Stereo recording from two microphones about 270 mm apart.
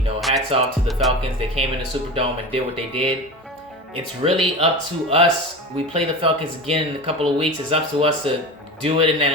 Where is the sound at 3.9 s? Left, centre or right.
Right.